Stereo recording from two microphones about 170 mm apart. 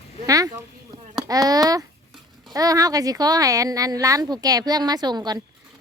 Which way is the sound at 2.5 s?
20° right (ahead or behind).